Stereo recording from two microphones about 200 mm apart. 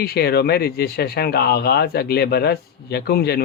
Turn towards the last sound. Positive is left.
turn(degrees=55)  # may be behind; listen again after turning